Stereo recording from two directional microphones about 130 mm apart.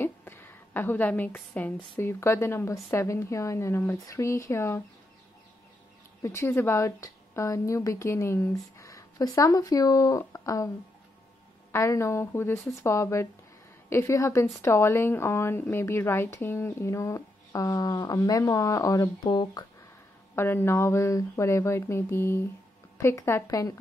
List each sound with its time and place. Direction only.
0.0 s a sound: 15° left (ahead or behind)
2.0 s a woman's voice: 20° left (ahead or behind)
6.2 s a woman's voice: 20° left (ahead or behind)
11.7 s a woman's voice: 20° left (ahead or behind)
20.3 s a woman's voice: 20° left (ahead or behind)